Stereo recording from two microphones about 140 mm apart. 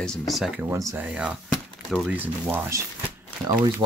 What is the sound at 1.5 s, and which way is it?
Crumpling, 5° left (ahead or behind).